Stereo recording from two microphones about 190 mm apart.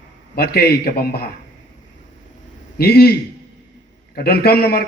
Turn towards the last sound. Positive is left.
turn(degrees=55)  # may be behind; listen again after turning